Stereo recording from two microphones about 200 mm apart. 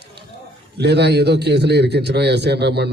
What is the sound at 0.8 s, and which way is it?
A man's voice, 55° right (ahead or behind).